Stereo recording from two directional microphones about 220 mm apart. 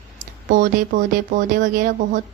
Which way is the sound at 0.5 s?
35° right (ahead or behind).